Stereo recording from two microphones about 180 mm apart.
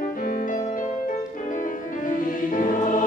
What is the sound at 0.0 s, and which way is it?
Music, 50° left (ahead or behind).